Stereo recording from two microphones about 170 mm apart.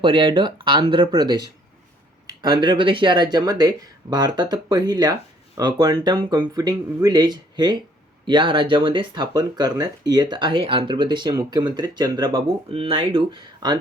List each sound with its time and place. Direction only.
0.0 s speech: 30° right (ahead or behind)